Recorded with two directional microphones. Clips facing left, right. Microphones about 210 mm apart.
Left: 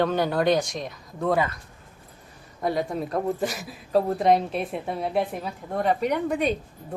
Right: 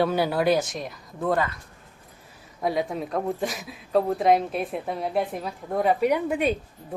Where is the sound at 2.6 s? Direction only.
Centre (ahead or behind).